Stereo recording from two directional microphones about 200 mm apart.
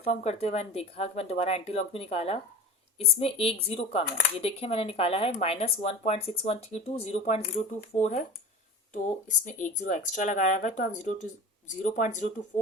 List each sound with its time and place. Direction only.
0.1 s speech: 35° left (ahead or behind)